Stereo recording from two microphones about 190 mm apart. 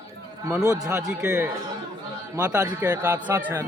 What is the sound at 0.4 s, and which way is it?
Speech, 15° right (ahead or behind).